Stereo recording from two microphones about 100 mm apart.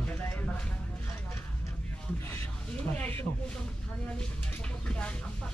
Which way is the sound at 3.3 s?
55° left (ahead or behind).